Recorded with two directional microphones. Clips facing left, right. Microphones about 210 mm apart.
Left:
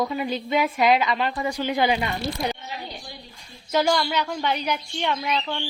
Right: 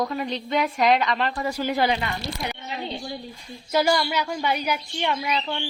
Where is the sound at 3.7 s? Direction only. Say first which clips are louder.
Even; 5° right (ahead or behind).